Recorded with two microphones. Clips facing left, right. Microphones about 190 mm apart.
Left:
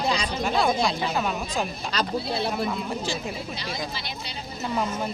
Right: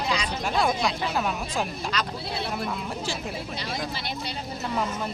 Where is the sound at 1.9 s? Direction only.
30° left (ahead or behind).